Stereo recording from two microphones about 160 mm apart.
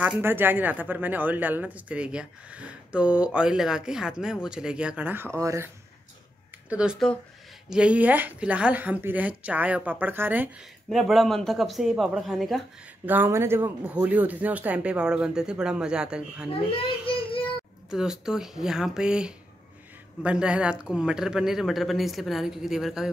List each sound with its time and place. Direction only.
0.0 s speech: 10° right (ahead or behind)
6.7 s speech: 5° right (ahead or behind)
10.9 s speech: centre (ahead or behind)
13.0 s speech: 10° right (ahead or behind)
16.7 s child singing: 35° left (ahead or behind)
17.8 s speech: 5° right (ahead or behind)